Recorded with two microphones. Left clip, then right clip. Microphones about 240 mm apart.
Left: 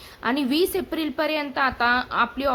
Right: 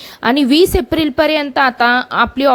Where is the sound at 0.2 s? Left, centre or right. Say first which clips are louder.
Right 11 dB; right.